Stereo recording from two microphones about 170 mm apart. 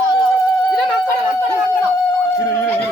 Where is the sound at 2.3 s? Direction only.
15° left (ahead or behind).